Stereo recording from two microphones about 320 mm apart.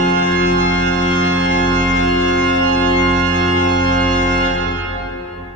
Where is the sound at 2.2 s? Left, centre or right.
Left.